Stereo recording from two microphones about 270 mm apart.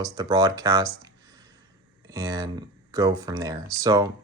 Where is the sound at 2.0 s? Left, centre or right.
Centre.